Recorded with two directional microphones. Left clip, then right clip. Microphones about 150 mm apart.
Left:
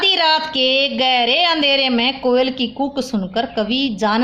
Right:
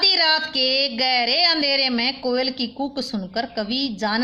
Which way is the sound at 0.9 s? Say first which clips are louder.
Left 4 dB; 20° right (ahead or behind).